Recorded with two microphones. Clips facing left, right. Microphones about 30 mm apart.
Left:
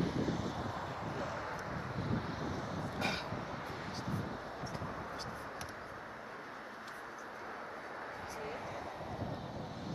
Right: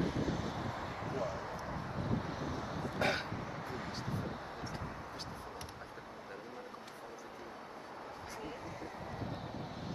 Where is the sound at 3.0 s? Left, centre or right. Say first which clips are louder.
Right 4 dB; right.